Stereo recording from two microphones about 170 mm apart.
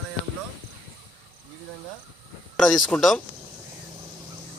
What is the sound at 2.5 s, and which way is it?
Speech, centre (ahead or behind).